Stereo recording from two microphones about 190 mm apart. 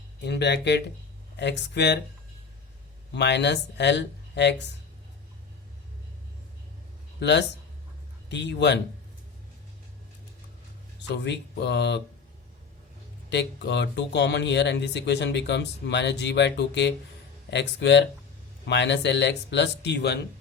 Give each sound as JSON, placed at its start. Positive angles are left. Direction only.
{"t": 0.2, "sound": "speech", "side_deg": 60}
{"t": 3.1, "sound": "speech", "side_deg": 65}
{"t": 7.2, "sound": "speech", "side_deg": 65}
{"t": 11.1, "sound": "speech", "side_deg": 65}
{"t": 13.3, "sound": "speech", "side_deg": 65}